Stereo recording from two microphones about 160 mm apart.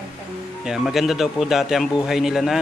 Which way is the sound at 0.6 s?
Centre (ahead or behind).